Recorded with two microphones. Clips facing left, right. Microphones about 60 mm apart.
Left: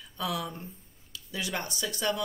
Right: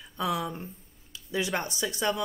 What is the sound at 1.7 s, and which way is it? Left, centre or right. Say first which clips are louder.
Speech: right 1 dB; right.